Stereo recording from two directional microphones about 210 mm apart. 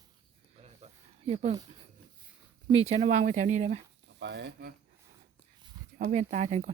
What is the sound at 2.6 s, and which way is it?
Speech, 30° right (ahead or behind).